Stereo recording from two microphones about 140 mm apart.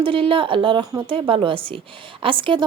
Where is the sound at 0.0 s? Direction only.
40° right (ahead or behind).